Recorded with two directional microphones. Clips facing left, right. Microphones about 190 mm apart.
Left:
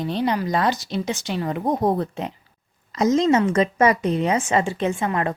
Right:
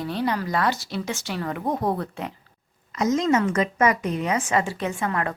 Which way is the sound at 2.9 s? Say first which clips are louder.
Left 3 dB; 30° left (ahead or behind).